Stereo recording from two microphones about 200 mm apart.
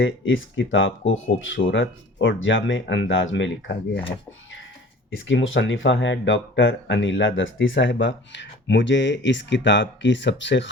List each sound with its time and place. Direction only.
0.0 s speech: 70° left (ahead or behind)
5.1 s speech: 70° left (ahead or behind)